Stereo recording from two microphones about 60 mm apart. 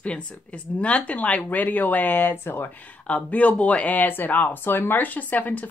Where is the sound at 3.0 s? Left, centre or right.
Left.